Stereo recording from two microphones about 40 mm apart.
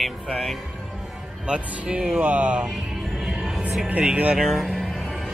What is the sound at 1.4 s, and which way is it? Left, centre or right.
Speech, right.